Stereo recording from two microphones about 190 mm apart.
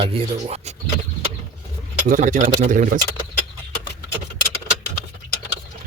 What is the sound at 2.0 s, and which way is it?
Speech, 40° right (ahead or behind).